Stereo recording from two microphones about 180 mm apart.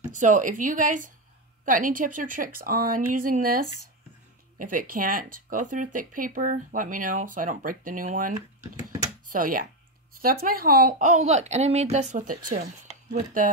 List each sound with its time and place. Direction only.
0.1 s speech: 45° right (ahead or behind)